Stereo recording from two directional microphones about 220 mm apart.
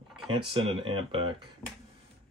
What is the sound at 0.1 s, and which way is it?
Speech, 25° right (ahead or behind).